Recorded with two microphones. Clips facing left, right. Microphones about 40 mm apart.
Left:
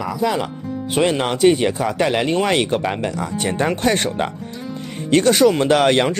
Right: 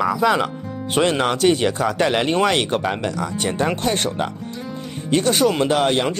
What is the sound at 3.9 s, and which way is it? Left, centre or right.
Speech, left.